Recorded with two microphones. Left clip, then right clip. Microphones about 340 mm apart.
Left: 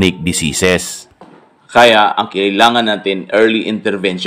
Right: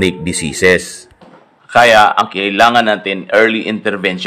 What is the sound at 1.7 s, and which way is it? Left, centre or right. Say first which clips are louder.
Speech: right 1 dB; centre.